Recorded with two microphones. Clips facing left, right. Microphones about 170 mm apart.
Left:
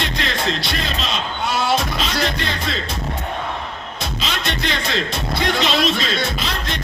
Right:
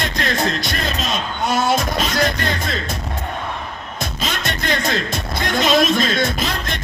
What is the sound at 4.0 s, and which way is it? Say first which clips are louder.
Music: right 1 dB; 45° right (ahead or behind).